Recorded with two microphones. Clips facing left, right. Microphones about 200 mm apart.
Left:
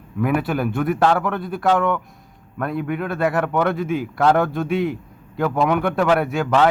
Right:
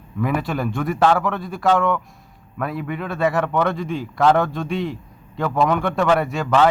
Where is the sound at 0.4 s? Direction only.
5° left (ahead or behind).